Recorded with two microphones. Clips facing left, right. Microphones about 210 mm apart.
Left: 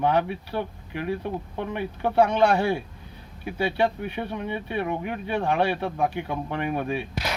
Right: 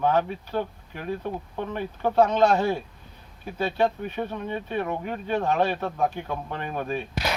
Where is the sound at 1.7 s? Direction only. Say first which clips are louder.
Even; 10° left (ahead or behind).